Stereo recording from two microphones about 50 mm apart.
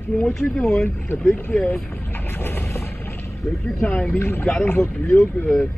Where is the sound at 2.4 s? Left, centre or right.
Left.